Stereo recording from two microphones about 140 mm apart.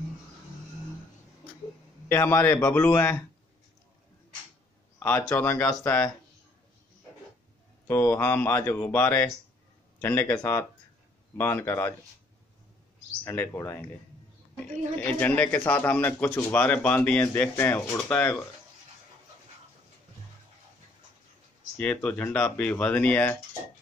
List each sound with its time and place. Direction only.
2.0 s speech: 20° left (ahead or behind)
4.9 s a sound: 15° left (ahead or behind)
5.3 s speech: 15° left (ahead or behind)
7.8 s speech: 10° left (ahead or behind)
13.2 s speech: 15° left (ahead or behind)
14.6 s speech: 10° left (ahead or behind)
21.7 s speech: 10° left (ahead or behind)